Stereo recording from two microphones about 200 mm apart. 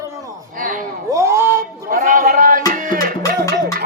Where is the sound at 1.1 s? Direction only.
15° right (ahead or behind).